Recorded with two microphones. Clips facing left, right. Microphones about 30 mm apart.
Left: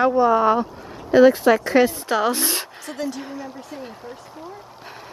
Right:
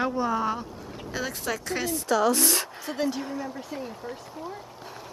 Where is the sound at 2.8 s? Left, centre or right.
Centre.